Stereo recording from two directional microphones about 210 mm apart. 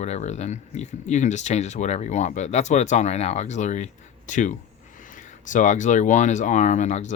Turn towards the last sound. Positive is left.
turn(degrees=35)  # may be behind; listen again after turning